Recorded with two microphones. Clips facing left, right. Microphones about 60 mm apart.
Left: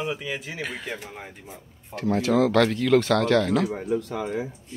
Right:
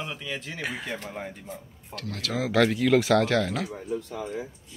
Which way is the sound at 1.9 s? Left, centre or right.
Left.